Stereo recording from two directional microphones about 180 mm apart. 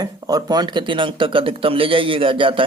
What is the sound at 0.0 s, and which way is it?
Speech, 20° right (ahead or behind).